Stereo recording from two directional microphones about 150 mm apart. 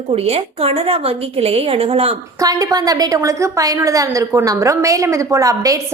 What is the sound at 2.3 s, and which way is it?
A woman's voice, 25° right (ahead or behind).